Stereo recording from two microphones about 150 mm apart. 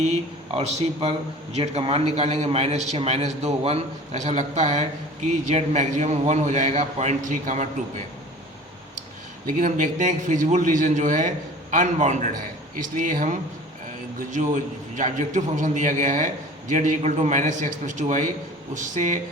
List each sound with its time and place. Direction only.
0.0 s a man's voice: 45° right (ahead or behind)
9.6 s a man's voice: 60° right (ahead or behind)